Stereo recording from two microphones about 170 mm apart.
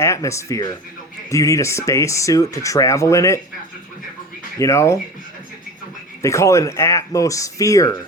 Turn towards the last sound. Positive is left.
turn(degrees=20)  # may be behind; listen again after turning